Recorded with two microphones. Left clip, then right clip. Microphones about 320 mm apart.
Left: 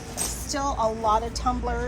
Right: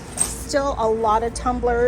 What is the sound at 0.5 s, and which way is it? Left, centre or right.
Speech, centre.